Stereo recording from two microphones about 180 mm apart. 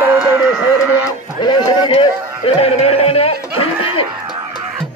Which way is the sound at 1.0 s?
20° left (ahead or behind).